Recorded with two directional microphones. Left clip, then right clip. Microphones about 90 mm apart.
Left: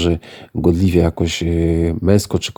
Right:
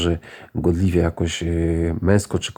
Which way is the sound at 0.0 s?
25° left (ahead or behind).